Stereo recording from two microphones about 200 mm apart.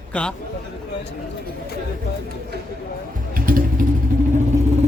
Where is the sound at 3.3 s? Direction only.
45° right (ahead or behind).